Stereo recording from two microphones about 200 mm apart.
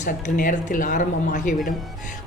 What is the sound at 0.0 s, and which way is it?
A woman's voice, 40° left (ahead or behind).